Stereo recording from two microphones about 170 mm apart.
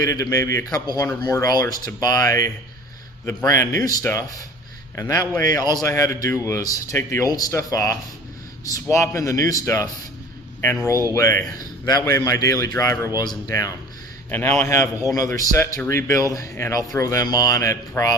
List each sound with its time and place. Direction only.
0.0 s speech: 20° left (ahead or behind)
11.1 s a man's voice: 15° left (ahead or behind)